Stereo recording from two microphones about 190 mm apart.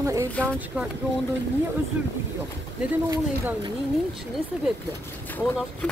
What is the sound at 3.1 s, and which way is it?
Speech, 15° right (ahead or behind).